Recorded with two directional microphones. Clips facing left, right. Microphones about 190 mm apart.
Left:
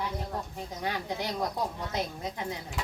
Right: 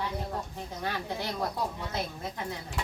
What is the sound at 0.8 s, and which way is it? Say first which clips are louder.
A woman's voice: left 1 dB; 15° left (ahead or behind).